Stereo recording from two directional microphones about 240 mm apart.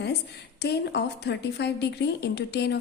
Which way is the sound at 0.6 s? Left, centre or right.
Left.